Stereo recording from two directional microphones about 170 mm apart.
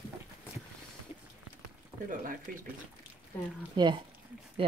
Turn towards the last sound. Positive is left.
turn(degrees=-25)  # may be behind; listen again after turning